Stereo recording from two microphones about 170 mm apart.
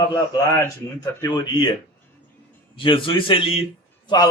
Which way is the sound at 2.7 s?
30° left (ahead or behind).